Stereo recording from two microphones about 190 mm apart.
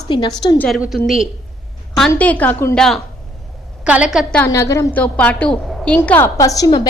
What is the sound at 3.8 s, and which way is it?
Speech, 5° right (ahead or behind).